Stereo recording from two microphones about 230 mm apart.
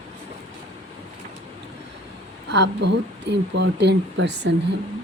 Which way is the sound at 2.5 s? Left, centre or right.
Right.